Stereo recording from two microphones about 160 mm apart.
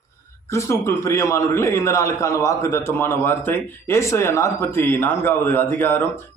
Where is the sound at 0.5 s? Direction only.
15° left (ahead or behind).